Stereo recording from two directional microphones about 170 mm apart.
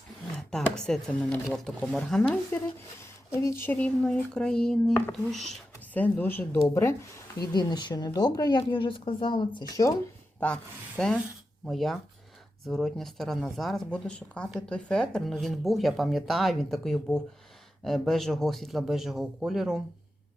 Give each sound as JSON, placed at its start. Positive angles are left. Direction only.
{"t": 0.3, "sound": "speech", "side_deg": 5}
{"t": 3.0, "sound": "a woman's voice", "side_deg": 15}
{"t": 10.4, "sound": "speech", "side_deg": 5}